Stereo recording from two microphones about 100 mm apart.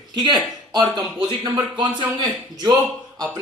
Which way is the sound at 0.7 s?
45° right (ahead or behind).